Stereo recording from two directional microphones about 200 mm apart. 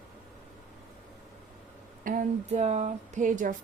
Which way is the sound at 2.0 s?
40° right (ahead or behind).